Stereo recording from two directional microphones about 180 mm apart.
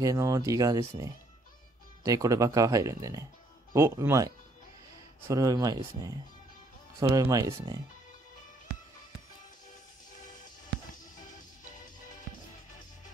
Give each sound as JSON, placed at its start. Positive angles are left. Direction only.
{"t": 0.0, "sound": "speech", "side_deg": -20}
{"t": 5.3, "sound": "speech", "side_deg": -20}
{"t": 7.2, "sound": "speech", "side_deg": -20}